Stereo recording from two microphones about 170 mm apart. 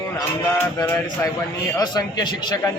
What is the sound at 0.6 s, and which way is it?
A man's voice, 15° left (ahead or behind).